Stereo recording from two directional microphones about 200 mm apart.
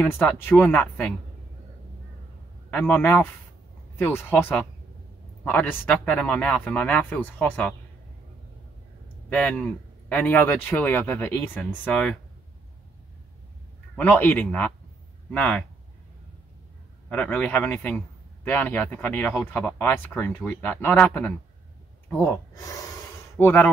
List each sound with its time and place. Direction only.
0.0 s speech: 10° left (ahead or behind)
2.7 s speech: 5° left (ahead or behind)
9.3 s speech: 5° left (ahead or behind)
13.9 s speech: 10° left (ahead or behind)
17.1 s speech: 5° left (ahead or behind)